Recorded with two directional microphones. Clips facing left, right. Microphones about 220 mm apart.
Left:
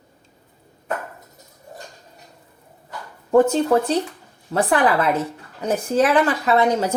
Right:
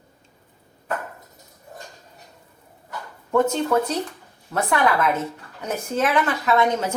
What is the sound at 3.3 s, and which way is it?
A woman's voice, 35° left (ahead or behind).